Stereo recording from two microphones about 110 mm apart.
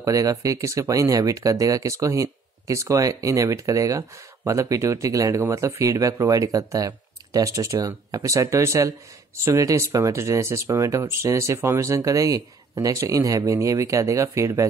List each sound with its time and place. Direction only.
0.0 s speech: 30° right (ahead or behind)